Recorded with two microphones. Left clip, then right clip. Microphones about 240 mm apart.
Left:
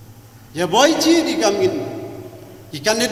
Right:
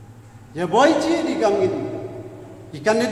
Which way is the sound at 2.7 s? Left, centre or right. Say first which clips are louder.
Left 1 dB; left.